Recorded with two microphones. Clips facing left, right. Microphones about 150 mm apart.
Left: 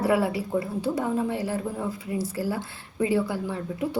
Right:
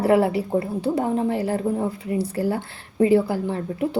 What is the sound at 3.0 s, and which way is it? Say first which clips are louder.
A woman's voice: right 7 dB; 60° right (ahead or behind).